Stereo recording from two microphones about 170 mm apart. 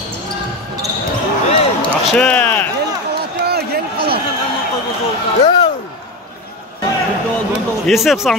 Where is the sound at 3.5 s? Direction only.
65° right (ahead or behind).